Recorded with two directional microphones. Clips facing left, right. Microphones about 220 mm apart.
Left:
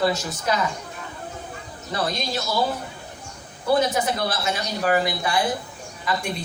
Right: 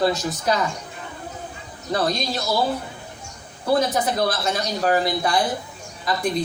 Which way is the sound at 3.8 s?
35° right (ahead or behind).